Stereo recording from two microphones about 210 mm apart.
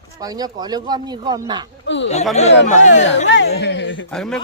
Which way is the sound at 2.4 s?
30° left (ahead or behind).